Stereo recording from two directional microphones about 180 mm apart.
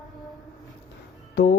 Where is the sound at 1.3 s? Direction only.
65° left (ahead or behind).